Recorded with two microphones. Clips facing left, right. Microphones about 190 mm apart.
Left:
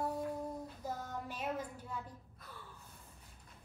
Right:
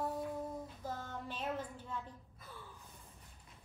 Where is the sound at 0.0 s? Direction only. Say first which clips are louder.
Left 1 dB; centre (ahead or behind).